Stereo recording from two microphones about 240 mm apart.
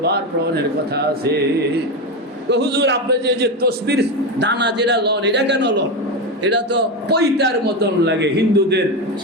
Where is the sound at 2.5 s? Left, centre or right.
Right.